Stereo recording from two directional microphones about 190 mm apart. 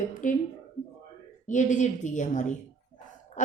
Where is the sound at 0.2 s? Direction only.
40° left (ahead or behind).